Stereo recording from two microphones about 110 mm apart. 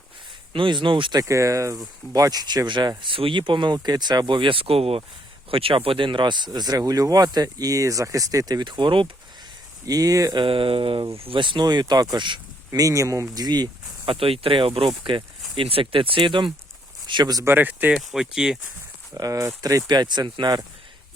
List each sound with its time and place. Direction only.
0.5 s speech: 50° right (ahead or behind)
1.2 s speech: 30° right (ahead or behind); by 9.0 s 45° right (ahead or behind)
9.8 s speech: 35° right (ahead or behind)
10.3 s speech: 50° right (ahead or behind)
12.8 s speech: 30° right (ahead or behind)
17.4 s speech: 20° right (ahead or behind)
17.9 s speech: 5° right (ahead or behind)
19.1 s speech: 30° right (ahead or behind)
19.9 s speech: 40° right (ahead or behind)